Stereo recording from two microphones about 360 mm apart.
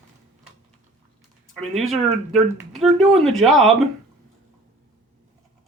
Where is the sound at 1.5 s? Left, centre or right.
Centre.